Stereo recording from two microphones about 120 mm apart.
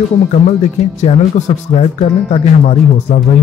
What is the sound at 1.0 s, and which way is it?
Speech, 70° left (ahead or behind).